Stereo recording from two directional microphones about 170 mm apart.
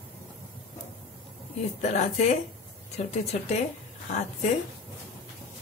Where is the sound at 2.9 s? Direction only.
40° left (ahead or behind).